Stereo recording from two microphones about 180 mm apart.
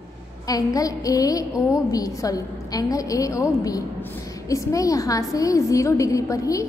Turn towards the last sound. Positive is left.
turn(degrees=20)  # may be behind; listen again after turning